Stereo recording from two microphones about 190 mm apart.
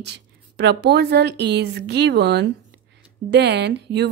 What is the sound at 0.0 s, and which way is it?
Speech, 65° right (ahead or behind).